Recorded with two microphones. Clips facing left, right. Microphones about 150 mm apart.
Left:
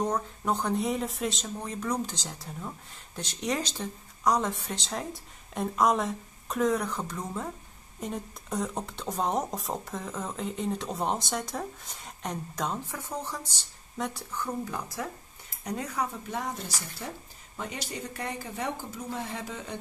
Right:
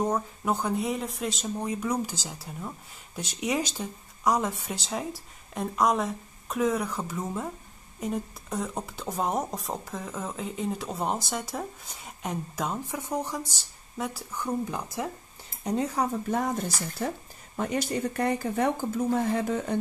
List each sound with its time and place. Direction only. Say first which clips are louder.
0.0 s a woman's voice: right 2 dB; 5° right (ahead or behind); by 16.1 s 30° right (ahead or behind)
16.3 s speech: right 7 dB; 50° right (ahead or behind)